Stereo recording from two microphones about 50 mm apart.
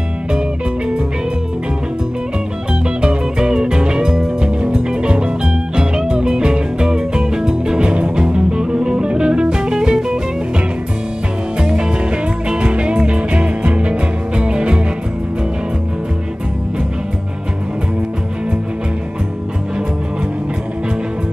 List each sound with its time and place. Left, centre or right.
3.0 s music: centre
11.6 s music: centre